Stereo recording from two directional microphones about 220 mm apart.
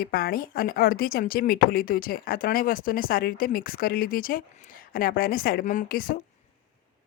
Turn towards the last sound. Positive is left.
turn(degrees=40)  # may be behind; listen again after turning